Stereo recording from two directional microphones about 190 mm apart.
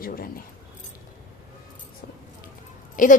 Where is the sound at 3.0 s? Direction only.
45° left (ahead or behind).